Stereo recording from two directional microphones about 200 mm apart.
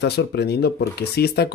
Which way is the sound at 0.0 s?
55° left (ahead or behind).